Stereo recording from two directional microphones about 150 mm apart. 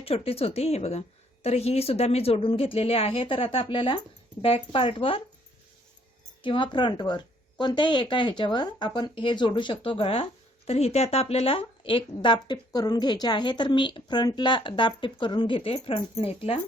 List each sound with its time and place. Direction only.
0.0 s speech: 40° left (ahead or behind)
6.4 s speech: 35° left (ahead or behind)